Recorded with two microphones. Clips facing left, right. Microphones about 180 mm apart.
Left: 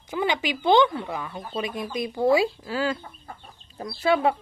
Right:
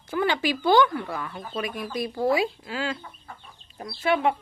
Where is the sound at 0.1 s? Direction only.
15° left (ahead or behind).